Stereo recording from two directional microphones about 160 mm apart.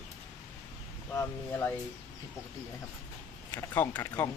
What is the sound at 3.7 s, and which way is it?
Speech, 10° left (ahead or behind).